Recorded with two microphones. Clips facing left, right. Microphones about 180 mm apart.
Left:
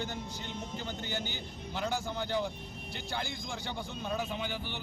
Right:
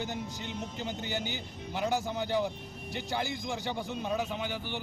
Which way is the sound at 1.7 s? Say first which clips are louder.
Right 4 dB; 15° right (ahead or behind).